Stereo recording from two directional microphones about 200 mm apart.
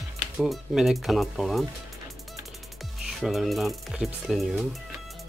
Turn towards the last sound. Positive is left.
turn(degrees=0)  # may be behind; listen again after turning